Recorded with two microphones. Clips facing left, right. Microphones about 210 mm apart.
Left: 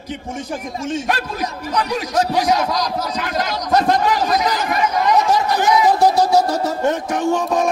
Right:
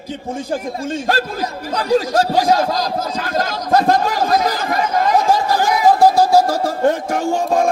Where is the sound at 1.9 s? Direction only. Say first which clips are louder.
Right 6 dB; 25° right (ahead or behind).